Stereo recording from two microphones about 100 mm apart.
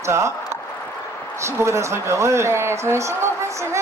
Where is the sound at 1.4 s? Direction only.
30° right (ahead or behind).